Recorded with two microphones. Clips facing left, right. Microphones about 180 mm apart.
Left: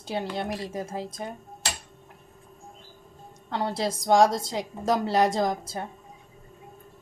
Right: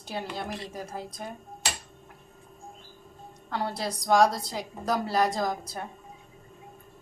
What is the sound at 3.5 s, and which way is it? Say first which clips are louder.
A woman's voice: left 3 dB; 25° left (ahead or behind).